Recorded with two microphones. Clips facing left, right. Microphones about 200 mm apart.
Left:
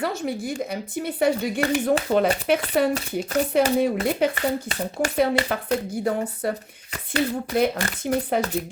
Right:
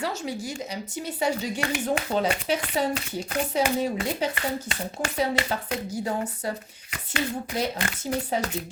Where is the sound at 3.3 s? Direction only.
45° left (ahead or behind).